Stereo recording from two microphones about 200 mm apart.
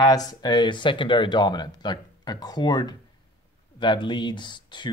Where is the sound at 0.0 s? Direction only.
20° left (ahead or behind).